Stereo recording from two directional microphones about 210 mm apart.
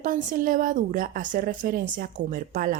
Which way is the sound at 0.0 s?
40° right (ahead or behind).